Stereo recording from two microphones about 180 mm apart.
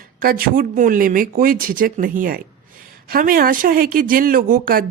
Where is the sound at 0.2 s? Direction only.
55° right (ahead or behind).